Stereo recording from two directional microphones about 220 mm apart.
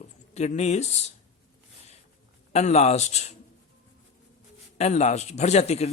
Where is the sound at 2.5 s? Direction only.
30° left (ahead or behind).